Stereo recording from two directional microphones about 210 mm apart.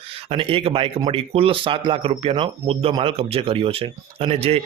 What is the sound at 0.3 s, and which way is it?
Speech, 25° right (ahead or behind).